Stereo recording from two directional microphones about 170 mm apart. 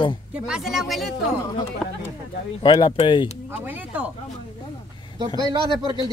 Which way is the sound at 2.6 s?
25° left (ahead or behind).